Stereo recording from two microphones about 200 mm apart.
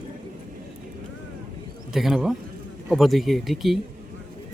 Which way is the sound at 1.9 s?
Centre (ahead or behind).